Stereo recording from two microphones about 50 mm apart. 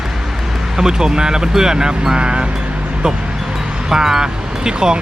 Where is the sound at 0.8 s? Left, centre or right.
Centre.